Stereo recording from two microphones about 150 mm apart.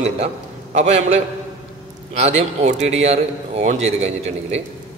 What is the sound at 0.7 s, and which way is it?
A man's voice, 45° right (ahead or behind).